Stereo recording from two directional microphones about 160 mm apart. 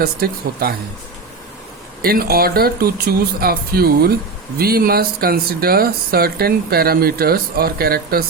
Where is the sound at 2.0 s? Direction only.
70° right (ahead or behind).